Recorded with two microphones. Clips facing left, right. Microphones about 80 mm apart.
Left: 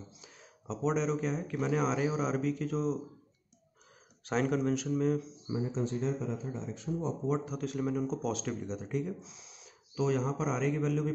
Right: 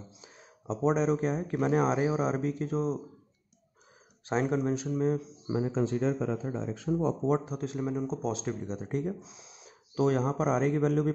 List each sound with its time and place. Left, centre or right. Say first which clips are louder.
0.2 s speech: right 2 dB; right
4.3 s speech: right 1 dB; right
5.5 s speech: right 5 dB; right
7.3 s speech: right 2 dB; right
8.1 s speech: right 2 dB; right
8.6 s speech: right 3 dB; right
9.9 s a man's voice: right 4 dB; right